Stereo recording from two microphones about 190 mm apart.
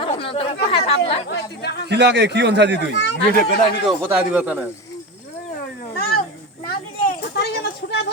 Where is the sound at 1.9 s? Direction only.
65° right (ahead or behind).